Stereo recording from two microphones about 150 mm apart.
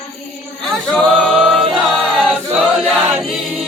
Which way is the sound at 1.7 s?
5° right (ahead or behind).